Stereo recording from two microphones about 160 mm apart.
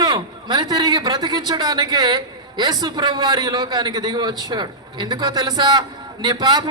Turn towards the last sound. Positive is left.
turn(degrees=-25)  # may be behind; listen again after turning